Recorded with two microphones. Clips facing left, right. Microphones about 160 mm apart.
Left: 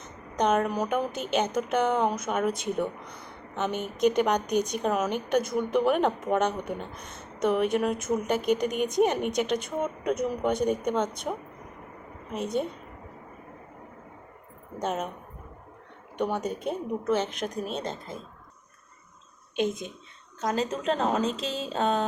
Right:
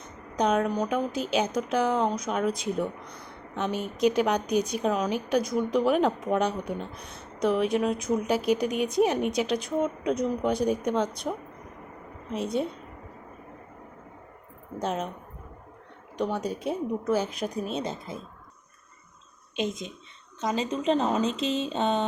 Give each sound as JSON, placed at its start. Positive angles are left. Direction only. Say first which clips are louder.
{"t": 0.3, "sound": "a woman's voice", "louder": "even", "side_deg": 0}
{"t": 14.8, "sound": "a woman's voice", "louder": "even", "side_deg": 5}
{"t": 16.1, "sound": "a woman's voice", "louder": "even", "side_deg": 5}
{"t": 20.7, "sound": "a woman's voice", "louder": "right 2 dB", "side_deg": 0}